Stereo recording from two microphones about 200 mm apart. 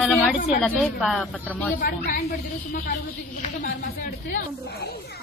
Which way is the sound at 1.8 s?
45° left (ahead or behind).